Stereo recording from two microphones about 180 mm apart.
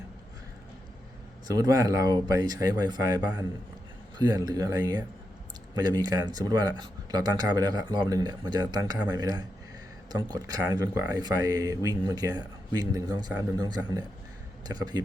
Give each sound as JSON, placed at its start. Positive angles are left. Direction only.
{"t": 1.5, "sound": "speech", "side_deg": -20}
{"t": 4.2, "sound": "speech", "side_deg": -20}